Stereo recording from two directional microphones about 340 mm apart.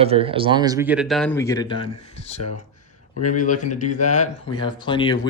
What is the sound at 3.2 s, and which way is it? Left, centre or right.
Speech, left.